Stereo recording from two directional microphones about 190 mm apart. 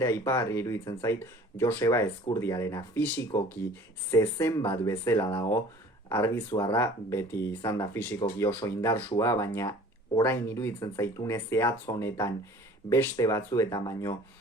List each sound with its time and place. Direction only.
0.0 s speech: 15° left (ahead or behind)
4.1 s speech: 10° left (ahead or behind)